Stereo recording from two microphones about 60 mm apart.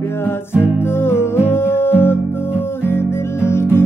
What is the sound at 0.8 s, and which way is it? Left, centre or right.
Music, left.